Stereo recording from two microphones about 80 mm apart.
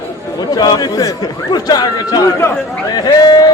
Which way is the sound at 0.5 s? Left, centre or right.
Left.